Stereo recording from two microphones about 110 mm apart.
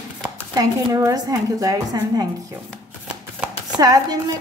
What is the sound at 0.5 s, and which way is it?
Speech, 35° right (ahead or behind).